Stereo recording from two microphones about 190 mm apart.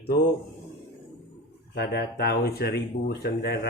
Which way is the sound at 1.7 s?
60° left (ahead or behind).